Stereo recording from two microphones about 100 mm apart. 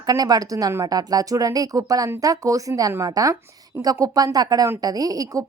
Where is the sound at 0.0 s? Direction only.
40° right (ahead or behind).